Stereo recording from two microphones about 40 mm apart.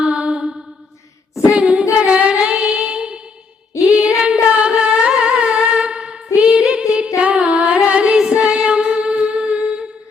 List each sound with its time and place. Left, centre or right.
0.0 s mantra: right
1.4 s female singing: right
2.6 s music: right
3.8 s humming: right
5.6 s humming: right
6.6 s music: right